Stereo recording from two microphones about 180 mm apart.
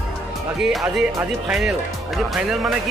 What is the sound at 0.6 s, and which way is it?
A man's voice, centre (ahead or behind).